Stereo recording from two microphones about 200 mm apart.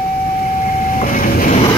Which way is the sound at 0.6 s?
40° left (ahead or behind).